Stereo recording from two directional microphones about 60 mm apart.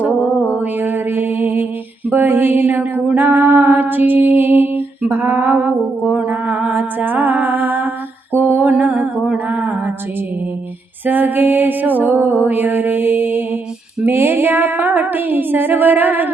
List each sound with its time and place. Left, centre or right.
0.6 s music: right
8.3 s mantra: right
8.6 s a sound: right
11.0 s music: right